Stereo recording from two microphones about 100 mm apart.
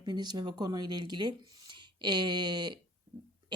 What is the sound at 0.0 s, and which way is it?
Speech, 45° right (ahead or behind).